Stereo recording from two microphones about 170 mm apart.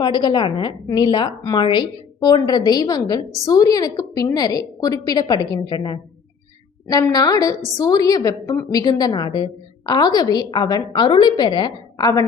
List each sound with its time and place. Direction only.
0.0 s a woman's voice: 25° left (ahead or behind)